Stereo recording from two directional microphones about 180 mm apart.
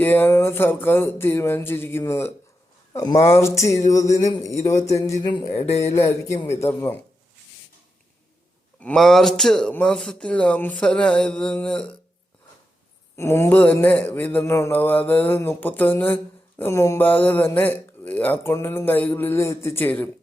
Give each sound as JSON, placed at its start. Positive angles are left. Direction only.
{"t": 0.0, "sound": "mantra", "side_deg": 10}
{"t": 3.8, "sound": "speech", "side_deg": 20}
{"t": 4.6, "sound": "mantra", "side_deg": 15}
{"t": 4.9, "sound": "speech", "side_deg": 15}
{"t": 6.5, "sound": "mantra", "side_deg": 15}
{"t": 8.8, "sound": "speech", "side_deg": 5}
{"t": 13.1, "sound": "mantra", "side_deg": 15}